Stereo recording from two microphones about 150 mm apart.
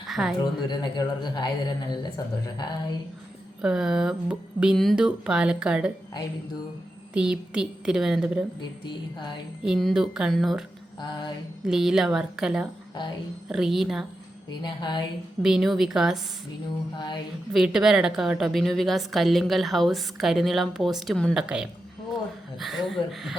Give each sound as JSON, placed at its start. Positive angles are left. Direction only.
{"t": 0.1, "sound": "a woman's voice", "side_deg": -5}
{"t": 0.3, "sound": "speech", "side_deg": 30}
{"t": 3.6, "sound": "a woman's voice", "side_deg": -5}
{"t": 7.1, "sound": "a woman's voice", "side_deg": -5}
{"t": 9.6, "sound": "a woman's voice", "side_deg": 0}
{"t": 11.0, "sound": "music", "side_deg": 30}
{"t": 11.6, "sound": "a woman's voice", "side_deg": -5}
{"t": 14.6, "sound": "speech", "side_deg": 30}
{"t": 15.4, "sound": "a woman's voice", "side_deg": -5}
{"t": 17.5, "sound": "a woman's voice", "side_deg": -5}